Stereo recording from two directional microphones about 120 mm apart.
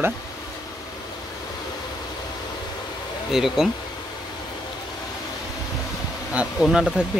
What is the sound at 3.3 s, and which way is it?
Speech, 5° right (ahead or behind).